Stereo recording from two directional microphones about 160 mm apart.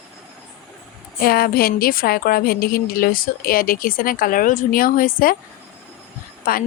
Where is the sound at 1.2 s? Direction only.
70° left (ahead or behind).